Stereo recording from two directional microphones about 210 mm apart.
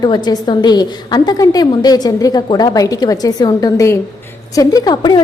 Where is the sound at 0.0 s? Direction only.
20° left (ahead or behind).